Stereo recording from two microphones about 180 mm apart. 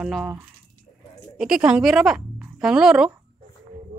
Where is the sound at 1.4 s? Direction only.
5° right (ahead or behind).